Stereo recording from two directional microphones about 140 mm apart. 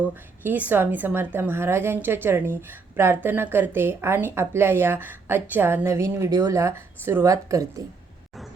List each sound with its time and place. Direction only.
0.4 s a woman's voice: 10° right (ahead or behind)